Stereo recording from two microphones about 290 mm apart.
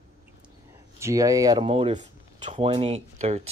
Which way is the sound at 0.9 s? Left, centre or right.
Centre.